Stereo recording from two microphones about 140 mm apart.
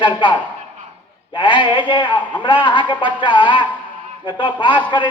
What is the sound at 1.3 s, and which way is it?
Speech, 35° left (ahead or behind).